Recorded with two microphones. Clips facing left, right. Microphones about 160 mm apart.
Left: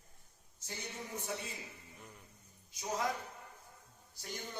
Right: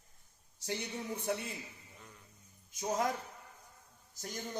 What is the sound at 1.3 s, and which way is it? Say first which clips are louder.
Speech: right 7 dB; 60° right (ahead or behind).